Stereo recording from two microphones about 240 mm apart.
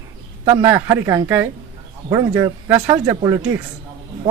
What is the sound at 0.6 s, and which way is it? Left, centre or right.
Speech, centre.